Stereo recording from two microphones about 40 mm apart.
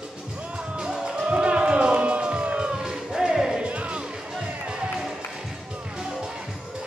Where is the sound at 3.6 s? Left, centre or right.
Right.